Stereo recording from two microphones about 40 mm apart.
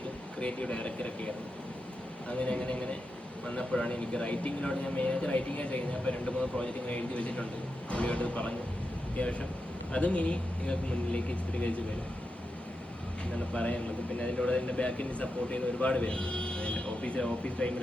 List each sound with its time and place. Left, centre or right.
0.3 s speech: left
2.3 s a man's voice: left
13.3 s a man's voice: left